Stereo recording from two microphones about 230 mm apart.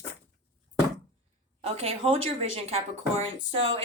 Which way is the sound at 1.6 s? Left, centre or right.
Right.